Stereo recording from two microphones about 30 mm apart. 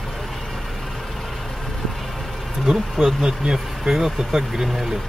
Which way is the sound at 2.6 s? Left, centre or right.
Centre.